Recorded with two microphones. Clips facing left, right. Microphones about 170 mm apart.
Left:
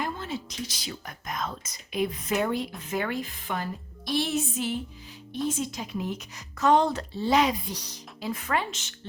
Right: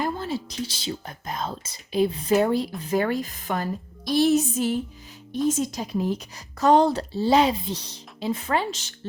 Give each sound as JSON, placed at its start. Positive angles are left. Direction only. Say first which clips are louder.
{"t": 0.0, "sound": "a woman's voice", "louder": "right 5 dB", "side_deg": -35}